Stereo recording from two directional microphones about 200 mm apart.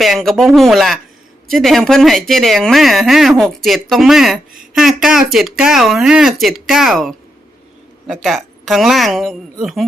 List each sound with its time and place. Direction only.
0.0 s speech: centre (ahead or behind)